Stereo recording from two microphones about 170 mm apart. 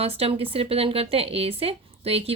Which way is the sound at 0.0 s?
35° right (ahead or behind).